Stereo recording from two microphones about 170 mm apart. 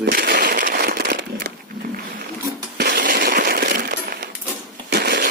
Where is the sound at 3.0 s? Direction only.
55° right (ahead or behind).